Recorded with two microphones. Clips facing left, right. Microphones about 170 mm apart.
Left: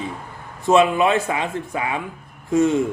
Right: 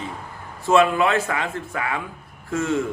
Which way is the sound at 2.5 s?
20° left (ahead or behind).